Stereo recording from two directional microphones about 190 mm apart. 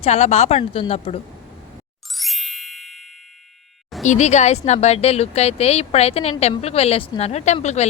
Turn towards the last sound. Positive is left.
turn(degrees=35)  # may be behind; listen again after turning